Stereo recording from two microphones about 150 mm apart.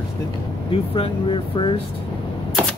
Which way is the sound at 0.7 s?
35° left (ahead or behind).